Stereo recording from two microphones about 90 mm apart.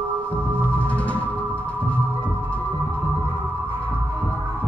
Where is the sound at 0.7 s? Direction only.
15° left (ahead or behind).